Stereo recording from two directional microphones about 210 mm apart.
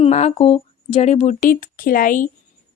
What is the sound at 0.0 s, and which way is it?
A woman's voice, 30° left (ahead or behind).